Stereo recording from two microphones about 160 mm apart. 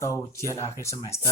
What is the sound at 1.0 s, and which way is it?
Speech, 40° left (ahead or behind).